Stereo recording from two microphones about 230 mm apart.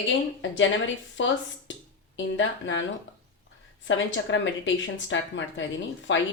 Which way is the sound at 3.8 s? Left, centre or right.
Left.